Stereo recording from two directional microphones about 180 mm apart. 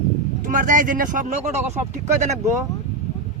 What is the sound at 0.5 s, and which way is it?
Speech, 45° right (ahead or behind).